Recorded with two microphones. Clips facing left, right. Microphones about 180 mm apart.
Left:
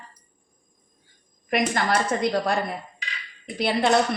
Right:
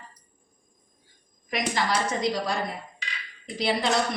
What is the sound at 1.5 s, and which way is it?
A woman's voice, 55° left (ahead or behind).